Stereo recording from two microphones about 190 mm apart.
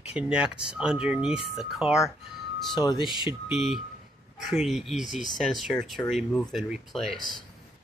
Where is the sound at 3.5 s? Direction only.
35° left (ahead or behind).